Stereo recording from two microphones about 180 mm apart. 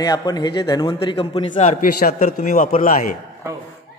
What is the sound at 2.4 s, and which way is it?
Speech, 40° left (ahead or behind).